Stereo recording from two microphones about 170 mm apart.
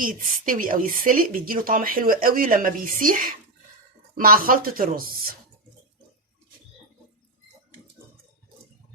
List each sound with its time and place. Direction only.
0.0 s speech: 55° right (ahead or behind)